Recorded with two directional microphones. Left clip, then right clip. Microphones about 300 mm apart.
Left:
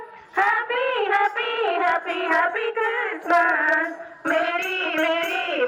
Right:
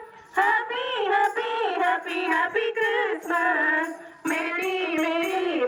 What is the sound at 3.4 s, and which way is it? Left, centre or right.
Music, left.